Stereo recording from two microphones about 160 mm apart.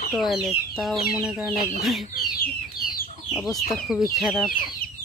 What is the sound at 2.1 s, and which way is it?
Chicken, 65° left (ahead or behind).